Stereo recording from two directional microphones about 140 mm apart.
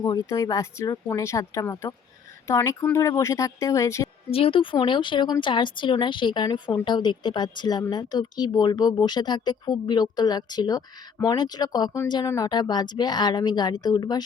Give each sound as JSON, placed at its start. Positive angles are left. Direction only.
{"t": 0.0, "sound": "speech", "side_deg": 30}
{"t": 4.3, "sound": "a woman's voice", "side_deg": 40}